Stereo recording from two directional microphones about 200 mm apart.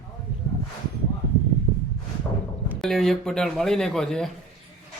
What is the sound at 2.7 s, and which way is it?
Speech, centre (ahead or behind).